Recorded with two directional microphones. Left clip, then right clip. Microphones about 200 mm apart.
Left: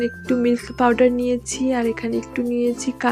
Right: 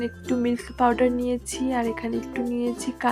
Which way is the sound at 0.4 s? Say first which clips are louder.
Left 4 dB; 20° left (ahead or behind).